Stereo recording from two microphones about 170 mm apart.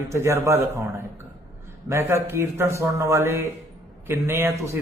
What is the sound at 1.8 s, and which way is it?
A man's voice, 15° right (ahead or behind).